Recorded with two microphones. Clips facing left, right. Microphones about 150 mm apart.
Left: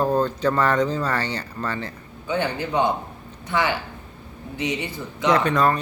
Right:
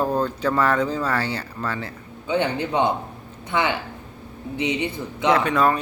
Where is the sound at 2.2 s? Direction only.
15° right (ahead or behind).